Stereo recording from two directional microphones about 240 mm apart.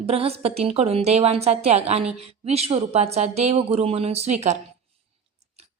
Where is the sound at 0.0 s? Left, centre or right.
Right.